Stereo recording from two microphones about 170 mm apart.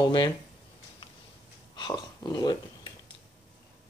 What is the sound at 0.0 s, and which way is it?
Speech, 25° left (ahead or behind).